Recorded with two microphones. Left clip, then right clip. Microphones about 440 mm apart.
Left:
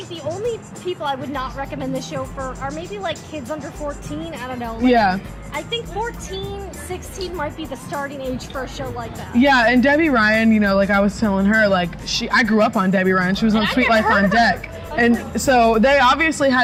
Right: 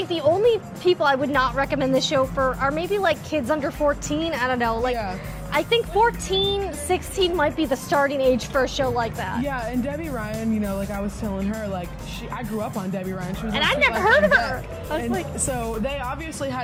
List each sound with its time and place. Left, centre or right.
0.1 s speech: right
9.4 s speech: left
13.5 s speech: right
15.0 s speech: left